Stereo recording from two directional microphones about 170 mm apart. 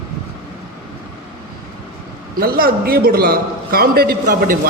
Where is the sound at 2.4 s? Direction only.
60° right (ahead or behind).